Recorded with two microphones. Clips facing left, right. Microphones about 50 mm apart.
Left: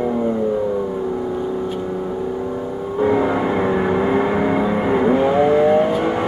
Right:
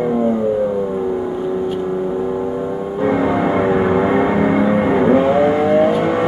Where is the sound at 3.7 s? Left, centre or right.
Centre.